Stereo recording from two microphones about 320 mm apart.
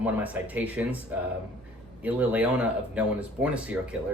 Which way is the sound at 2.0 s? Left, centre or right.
Centre.